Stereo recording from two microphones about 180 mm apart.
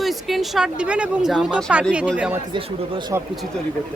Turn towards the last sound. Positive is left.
turn(degrees=-15)  # may be behind; listen again after turning